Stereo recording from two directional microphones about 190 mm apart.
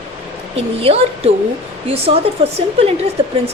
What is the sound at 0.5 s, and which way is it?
Speech, 30° right (ahead or behind).